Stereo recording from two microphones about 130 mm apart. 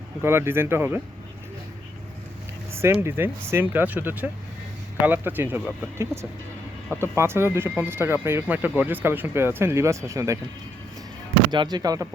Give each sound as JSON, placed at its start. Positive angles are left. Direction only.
{"t": 0.2, "sound": "speech", "side_deg": -20}
{"t": 2.7, "sound": "speech", "side_deg": -20}
{"t": 11.5, "sound": "speech", "side_deg": -35}